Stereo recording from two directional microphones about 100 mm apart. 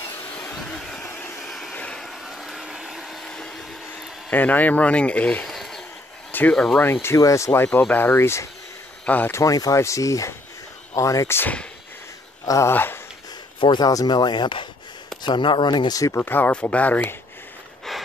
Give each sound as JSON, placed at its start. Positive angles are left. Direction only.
{"t": 0.6, "sound": "a sound", "side_deg": 5}
{"t": 1.4, "sound": "vehicle", "side_deg": 0}
{"t": 4.3, "sound": "speech", "side_deg": 15}
{"t": 5.5, "sound": "a sound", "side_deg": 0}
{"t": 6.3, "sound": "speech", "side_deg": 15}
{"t": 9.3, "sound": "speech", "side_deg": 35}
{"t": 13.6, "sound": "speech", "side_deg": 45}
{"t": 15.9, "sound": "speech", "side_deg": 30}